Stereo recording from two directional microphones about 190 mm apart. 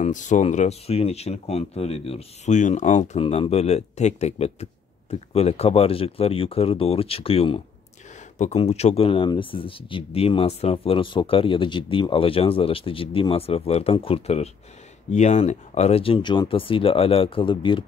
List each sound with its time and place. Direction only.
0.0 s speech: 40° left (ahead or behind)